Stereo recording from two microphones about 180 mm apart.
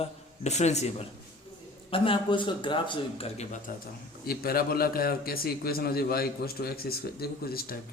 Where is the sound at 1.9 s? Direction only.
30° left (ahead or behind).